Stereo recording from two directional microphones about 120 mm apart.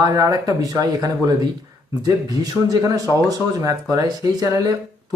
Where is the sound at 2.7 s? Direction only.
30° right (ahead or behind).